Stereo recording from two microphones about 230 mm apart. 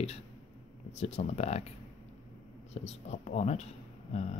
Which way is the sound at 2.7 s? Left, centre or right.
Left.